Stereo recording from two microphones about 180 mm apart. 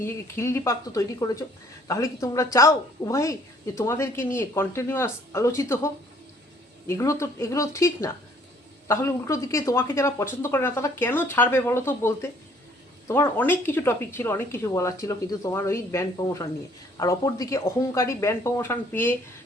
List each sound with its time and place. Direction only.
0.0 s a woman's voice: 15° left (ahead or behind)